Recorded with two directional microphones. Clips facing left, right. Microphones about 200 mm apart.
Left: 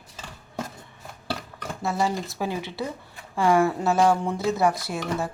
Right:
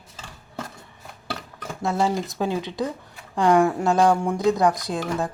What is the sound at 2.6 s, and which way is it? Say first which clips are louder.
Speech: right 4 dB; 15° right (ahead or behind).